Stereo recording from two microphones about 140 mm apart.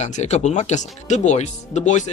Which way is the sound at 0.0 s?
55° left (ahead or behind).